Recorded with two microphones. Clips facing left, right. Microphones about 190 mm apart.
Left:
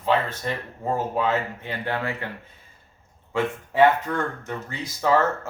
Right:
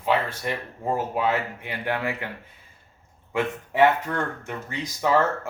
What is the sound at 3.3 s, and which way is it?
Speech, 15° right (ahead or behind).